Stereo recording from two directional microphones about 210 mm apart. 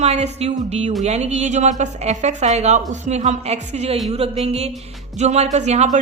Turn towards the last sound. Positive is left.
turn(degrees=-30)  # may be behind; listen again after turning